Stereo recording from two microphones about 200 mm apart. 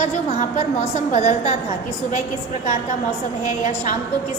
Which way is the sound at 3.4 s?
35° left (ahead or behind).